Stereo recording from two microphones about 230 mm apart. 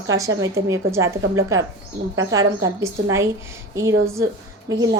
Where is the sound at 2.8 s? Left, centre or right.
Centre.